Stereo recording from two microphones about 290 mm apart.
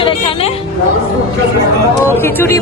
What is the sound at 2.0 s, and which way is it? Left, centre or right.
Speech, centre.